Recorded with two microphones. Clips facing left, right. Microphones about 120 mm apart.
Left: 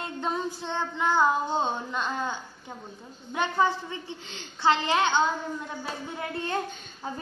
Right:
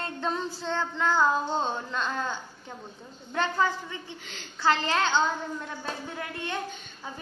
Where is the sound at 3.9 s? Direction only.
25° left (ahead or behind).